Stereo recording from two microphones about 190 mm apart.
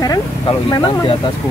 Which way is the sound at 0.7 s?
25° left (ahead or behind).